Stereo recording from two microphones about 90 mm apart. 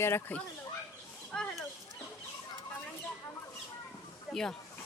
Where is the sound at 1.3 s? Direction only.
15° left (ahead or behind).